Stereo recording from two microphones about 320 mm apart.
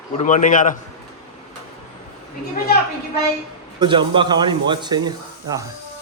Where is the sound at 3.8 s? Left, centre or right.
Centre.